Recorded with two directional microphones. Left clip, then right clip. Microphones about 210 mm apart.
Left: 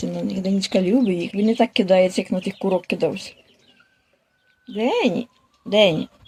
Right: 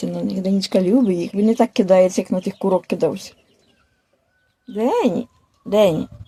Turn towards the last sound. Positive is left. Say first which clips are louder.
# right 1 dB
turn(degrees=-10)  # may be behind; listen again after turning